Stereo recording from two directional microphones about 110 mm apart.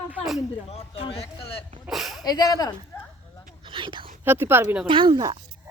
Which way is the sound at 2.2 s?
35° left (ahead or behind).